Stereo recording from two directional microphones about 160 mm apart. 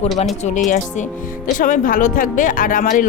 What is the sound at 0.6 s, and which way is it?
Speech, 55° left (ahead or behind).